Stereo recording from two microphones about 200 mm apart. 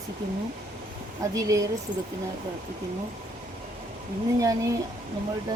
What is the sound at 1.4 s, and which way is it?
Speech, 15° right (ahead or behind).